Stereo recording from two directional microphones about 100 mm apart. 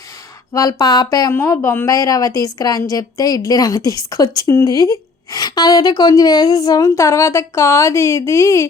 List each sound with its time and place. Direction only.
0.5 s a woman's voice: 40° left (ahead or behind)
1.3 s a woman's voice: 25° left (ahead or behind)